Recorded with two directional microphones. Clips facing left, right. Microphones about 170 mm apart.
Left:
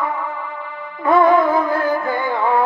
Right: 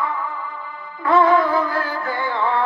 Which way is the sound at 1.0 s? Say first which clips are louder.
Left 2 dB; 25° left (ahead or behind).